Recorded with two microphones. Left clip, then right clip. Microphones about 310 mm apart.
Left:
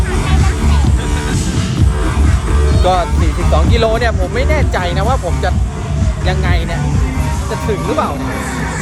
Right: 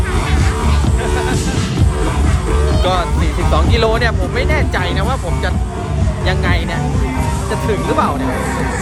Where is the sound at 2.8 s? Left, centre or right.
Centre.